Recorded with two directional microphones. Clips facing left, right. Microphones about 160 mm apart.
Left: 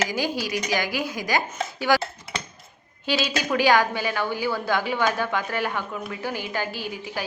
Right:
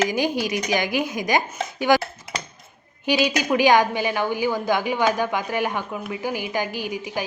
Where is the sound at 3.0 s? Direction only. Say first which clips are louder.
Right 4 dB; 15° right (ahead or behind).